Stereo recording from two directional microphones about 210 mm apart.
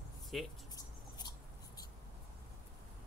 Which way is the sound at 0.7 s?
20° left (ahead or behind).